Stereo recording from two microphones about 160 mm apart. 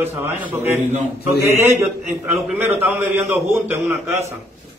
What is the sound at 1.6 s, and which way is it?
A man's voice, 15° right (ahead or behind).